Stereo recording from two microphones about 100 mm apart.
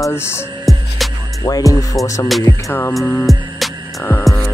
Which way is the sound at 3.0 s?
15° left (ahead or behind).